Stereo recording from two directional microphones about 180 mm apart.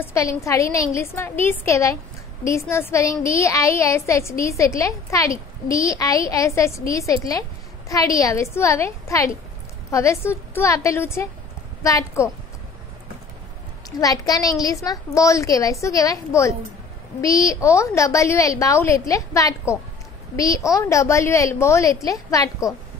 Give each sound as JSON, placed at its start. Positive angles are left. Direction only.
{"t": 0.0, "sound": "a woman's voice", "side_deg": 15}
{"t": 13.8, "sound": "a woman's voice", "side_deg": 20}